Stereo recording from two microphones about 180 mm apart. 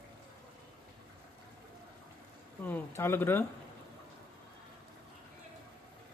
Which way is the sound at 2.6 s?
10° left (ahead or behind).